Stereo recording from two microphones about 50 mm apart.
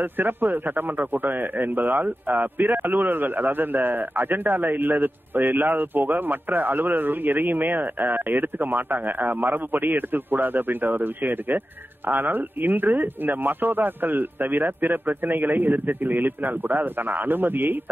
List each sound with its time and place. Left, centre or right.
0.0 s a man's voice: right